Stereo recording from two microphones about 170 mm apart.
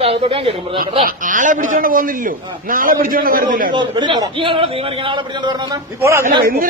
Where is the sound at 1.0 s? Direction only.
50° right (ahead or behind).